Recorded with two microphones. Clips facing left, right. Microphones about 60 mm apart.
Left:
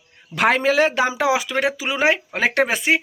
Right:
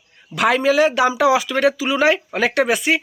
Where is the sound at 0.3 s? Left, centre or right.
Left.